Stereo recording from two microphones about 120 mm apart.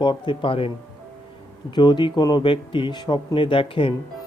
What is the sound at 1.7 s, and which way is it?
Speech, 40° left (ahead or behind).